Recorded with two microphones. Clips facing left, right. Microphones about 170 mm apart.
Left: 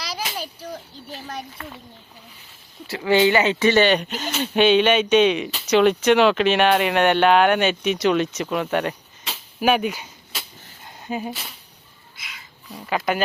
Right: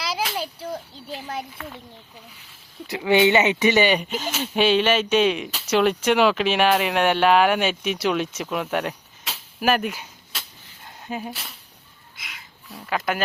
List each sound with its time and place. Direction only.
0.4 s a sound: 25° right (ahead or behind)
2.8 s speech: 20° right (ahead or behind); by 11.5 s centre (ahead or behind)
12.6 s speech: centre (ahead or behind)